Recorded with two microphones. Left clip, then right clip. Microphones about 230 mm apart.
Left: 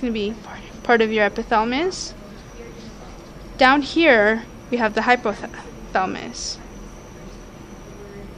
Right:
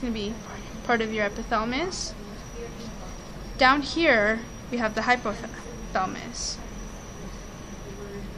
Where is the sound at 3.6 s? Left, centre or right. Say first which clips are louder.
Left 5 dB; left.